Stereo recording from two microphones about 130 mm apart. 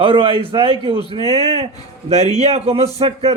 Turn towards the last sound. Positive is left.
turn(degrees=-50)  # may be behind; listen again after turning